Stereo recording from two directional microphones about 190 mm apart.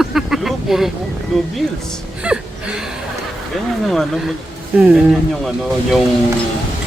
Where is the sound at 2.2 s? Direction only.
5° right (ahead or behind).